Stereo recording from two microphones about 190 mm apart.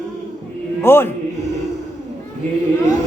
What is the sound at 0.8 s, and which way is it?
Speech, 10° left (ahead or behind).